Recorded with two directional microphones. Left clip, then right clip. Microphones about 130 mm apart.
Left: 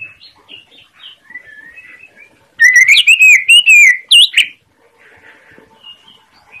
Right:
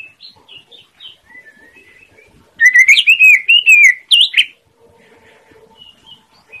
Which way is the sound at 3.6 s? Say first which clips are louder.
Left 2 dB; 35° right (ahead or behind).